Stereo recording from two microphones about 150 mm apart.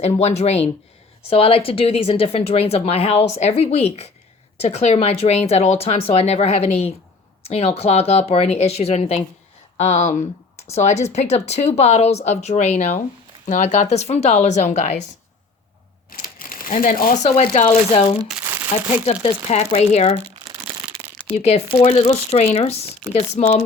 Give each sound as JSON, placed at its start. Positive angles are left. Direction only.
{"t": 0.0, "sound": "speech", "side_deg": 45}
{"t": 16.0, "sound": "a sound", "side_deg": 70}
{"t": 17.9, "sound": "speech", "side_deg": 40}
{"t": 18.4, "sound": "crumpling", "side_deg": -10}
{"t": 19.5, "sound": "speech", "side_deg": 45}
{"t": 21.0, "sound": "a sound", "side_deg": -40}
{"t": 21.3, "sound": "speech", "side_deg": 45}